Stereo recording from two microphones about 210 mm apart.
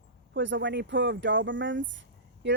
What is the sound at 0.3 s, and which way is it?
Speech, 60° right (ahead or behind).